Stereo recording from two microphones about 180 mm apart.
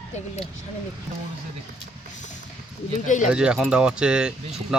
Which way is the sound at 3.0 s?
45° left (ahead or behind).